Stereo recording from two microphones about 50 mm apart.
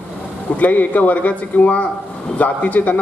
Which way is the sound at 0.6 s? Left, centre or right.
Left.